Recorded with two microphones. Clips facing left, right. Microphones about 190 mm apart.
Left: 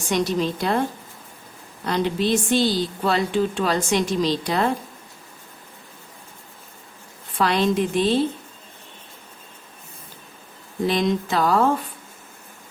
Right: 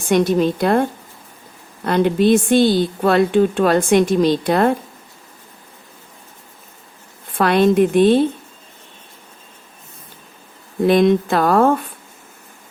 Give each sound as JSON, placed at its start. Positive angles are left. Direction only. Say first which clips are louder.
{"t": 0.1, "sound": "a woman's voice", "louder": "right 7 dB", "side_deg": -55}
{"t": 7.3, "sound": "a woman's voice", "louder": "right 7 dB", "side_deg": -55}
{"t": 10.8, "sound": "a woman's voice", "louder": "right 8 dB", "side_deg": -55}